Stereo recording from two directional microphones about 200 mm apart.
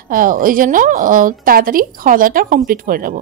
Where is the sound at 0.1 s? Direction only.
45° right (ahead or behind).